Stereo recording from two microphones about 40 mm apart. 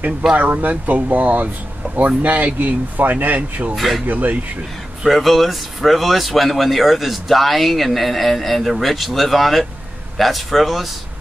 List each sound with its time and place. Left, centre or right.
0.4 s speech: right
3.7 s speech: centre
4.1 s speech: right
5.0 s speech: centre